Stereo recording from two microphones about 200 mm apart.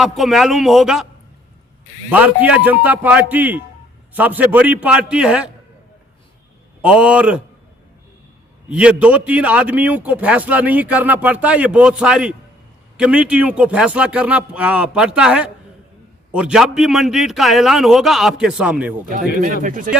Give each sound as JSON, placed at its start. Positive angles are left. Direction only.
{"t": 0.0, "sound": "a man's voice", "side_deg": 0}
{"t": 2.0, "sound": "a man's voice", "side_deg": -10}
{"t": 6.8, "sound": "a man's voice", "side_deg": -5}
{"t": 8.7, "sound": "a man's voice", "side_deg": -5}
{"t": 19.6, "sound": "speech", "side_deg": -40}